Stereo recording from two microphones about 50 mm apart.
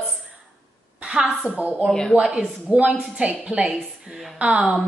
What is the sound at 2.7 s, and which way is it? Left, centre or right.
A woman's voice, right.